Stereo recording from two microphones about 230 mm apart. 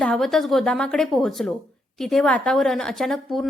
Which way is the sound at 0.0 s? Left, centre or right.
Centre.